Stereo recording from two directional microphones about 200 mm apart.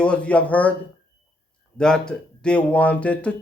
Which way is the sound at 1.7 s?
5° left (ahead or behind).